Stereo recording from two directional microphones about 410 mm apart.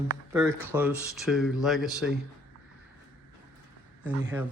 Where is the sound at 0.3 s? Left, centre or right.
Centre.